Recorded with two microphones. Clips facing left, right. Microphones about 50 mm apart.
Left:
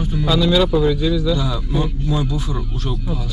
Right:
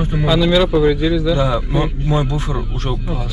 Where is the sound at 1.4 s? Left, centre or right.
Right.